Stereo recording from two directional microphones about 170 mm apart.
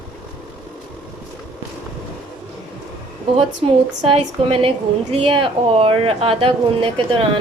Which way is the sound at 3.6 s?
30° right (ahead or behind).